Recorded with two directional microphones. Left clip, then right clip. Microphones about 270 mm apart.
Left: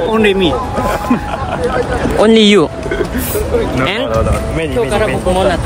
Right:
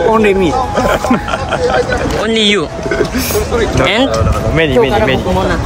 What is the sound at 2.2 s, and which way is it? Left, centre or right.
Speech, centre.